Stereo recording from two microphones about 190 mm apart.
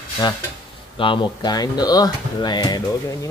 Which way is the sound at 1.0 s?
25° left (ahead or behind).